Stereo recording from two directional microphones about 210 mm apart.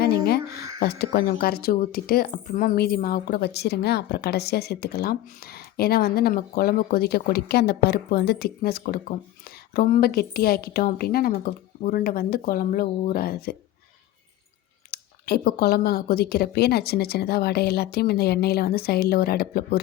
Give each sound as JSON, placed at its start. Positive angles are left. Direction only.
{"t": 0.0, "sound": "a sound", "side_deg": 50}
{"t": 0.5, "sound": "speech", "side_deg": 45}
{"t": 14.8, "sound": "speech", "side_deg": 45}